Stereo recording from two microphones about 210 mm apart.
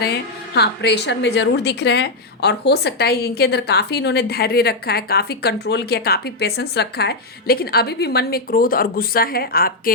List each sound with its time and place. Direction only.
0.0 s a woman's voice: 50° left (ahead or behind)